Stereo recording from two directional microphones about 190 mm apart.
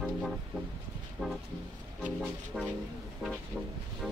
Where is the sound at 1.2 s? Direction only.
Centre (ahead or behind).